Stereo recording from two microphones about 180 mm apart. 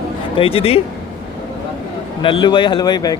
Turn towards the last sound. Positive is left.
turn(degrees=20)  # may be behind; listen again after turning